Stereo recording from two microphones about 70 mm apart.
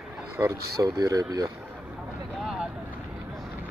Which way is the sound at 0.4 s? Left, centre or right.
Right.